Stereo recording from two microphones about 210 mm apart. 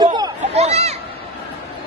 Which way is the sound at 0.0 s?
20° right (ahead or behind).